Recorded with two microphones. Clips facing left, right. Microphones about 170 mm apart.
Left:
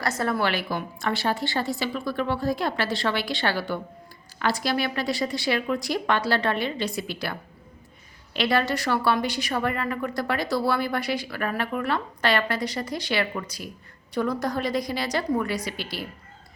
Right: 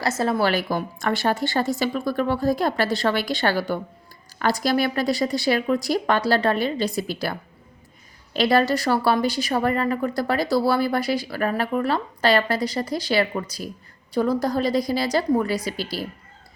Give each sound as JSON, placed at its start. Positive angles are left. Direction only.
{"t": 0.2, "sound": "a woman's voice", "side_deg": -25}
{"t": 0.4, "sound": "a woman's voice", "side_deg": -40}